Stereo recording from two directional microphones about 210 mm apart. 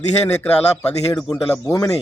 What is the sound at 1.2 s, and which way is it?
Speech, 5° left (ahead or behind).